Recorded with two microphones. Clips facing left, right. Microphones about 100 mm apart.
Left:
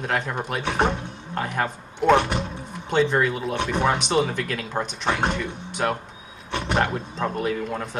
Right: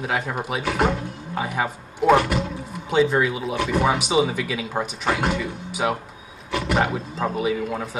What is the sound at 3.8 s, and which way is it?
Speech, 5° right (ahead or behind).